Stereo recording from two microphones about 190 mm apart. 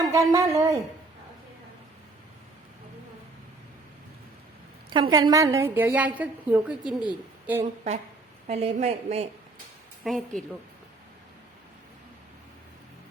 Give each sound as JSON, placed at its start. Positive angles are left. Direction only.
{"t": 0.0, "sound": "a woman's voice", "side_deg": -15}
{"t": 4.9, "sound": "a woman's voice", "side_deg": -25}
{"t": 8.4, "sound": "a woman's voice", "side_deg": -35}
{"t": 10.0, "sound": "speech", "side_deg": 0}